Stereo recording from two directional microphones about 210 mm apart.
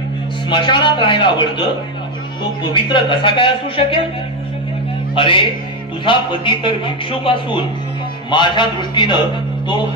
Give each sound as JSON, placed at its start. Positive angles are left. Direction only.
{"t": 0.5, "sound": "a man's voice", "side_deg": 20}
{"t": 5.1, "sound": "a man's voice", "side_deg": 25}